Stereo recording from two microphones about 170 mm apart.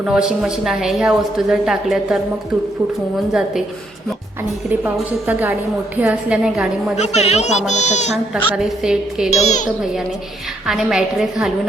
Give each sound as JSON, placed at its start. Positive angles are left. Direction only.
{"t": 0.0, "sound": "a woman's voice", "side_deg": -5}
{"t": 4.7, "sound": "a woman's voice", "side_deg": -10}
{"t": 6.9, "sound": "a woman's voice", "side_deg": 40}
{"t": 8.5, "sound": "a woman's voice", "side_deg": -5}
{"t": 9.4, "sound": "speech", "side_deg": 45}
{"t": 10.7, "sound": "a woman's voice", "side_deg": 0}